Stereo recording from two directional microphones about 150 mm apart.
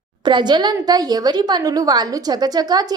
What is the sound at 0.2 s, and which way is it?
A woman's voice, 30° right (ahead or behind).